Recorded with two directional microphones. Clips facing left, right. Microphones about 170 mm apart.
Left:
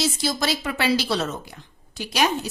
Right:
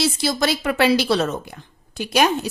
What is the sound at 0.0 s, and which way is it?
A woman's voice, 65° right (ahead or behind).